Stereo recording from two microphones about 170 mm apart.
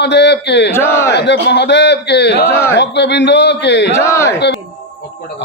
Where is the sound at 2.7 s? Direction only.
90° left.